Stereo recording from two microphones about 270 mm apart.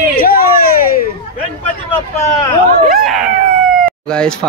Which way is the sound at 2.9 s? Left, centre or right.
Centre.